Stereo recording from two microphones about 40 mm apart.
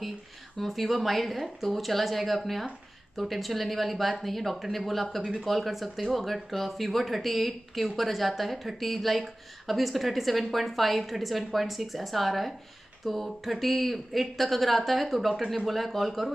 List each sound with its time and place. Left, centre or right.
0.6 s speech: centre